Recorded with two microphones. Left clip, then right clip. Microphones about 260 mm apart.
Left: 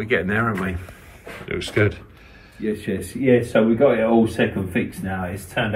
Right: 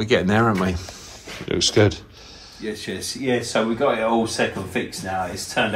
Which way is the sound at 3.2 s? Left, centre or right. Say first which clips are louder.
Left 5 dB; left.